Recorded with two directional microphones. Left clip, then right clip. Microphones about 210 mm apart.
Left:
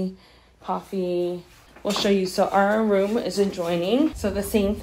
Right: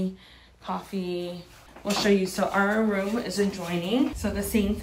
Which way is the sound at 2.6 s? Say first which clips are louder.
Left 4 dB; 35° left (ahead or behind).